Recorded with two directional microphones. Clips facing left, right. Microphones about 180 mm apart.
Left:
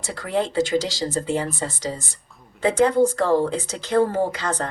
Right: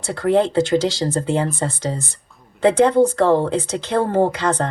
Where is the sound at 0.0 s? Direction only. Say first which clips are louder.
Right 7 dB; 60° right (ahead or behind).